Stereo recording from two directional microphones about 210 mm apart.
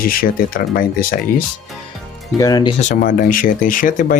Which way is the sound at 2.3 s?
20° left (ahead or behind).